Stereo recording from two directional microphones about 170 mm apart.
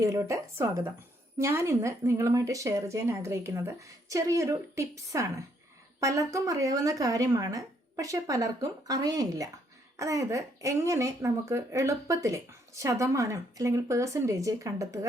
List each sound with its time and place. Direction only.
0.0 s a woman's voice: 20° right (ahead or behind)